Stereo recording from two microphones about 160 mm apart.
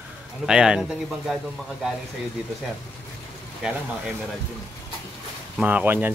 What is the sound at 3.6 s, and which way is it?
Speech, 5° right (ahead or behind).